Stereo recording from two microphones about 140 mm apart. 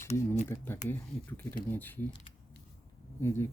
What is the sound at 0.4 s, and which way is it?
Speech, 15° left (ahead or behind).